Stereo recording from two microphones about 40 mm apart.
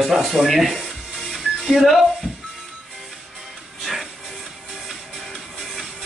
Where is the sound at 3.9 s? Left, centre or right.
Centre.